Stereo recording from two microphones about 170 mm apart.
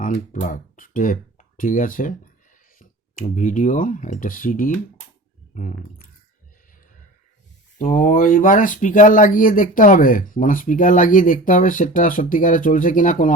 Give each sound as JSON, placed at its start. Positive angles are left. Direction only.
{"t": 0.0, "sound": "speech", "side_deg": 50}
{"t": 7.8, "sound": "speech", "side_deg": 50}